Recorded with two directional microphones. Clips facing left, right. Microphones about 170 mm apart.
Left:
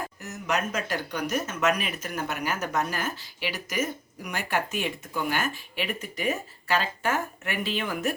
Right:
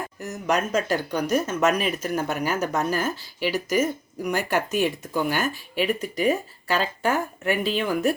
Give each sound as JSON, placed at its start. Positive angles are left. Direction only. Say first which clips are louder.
{"t": 0.2, "sound": "speech", "louder": "right 5 dB", "side_deg": -35}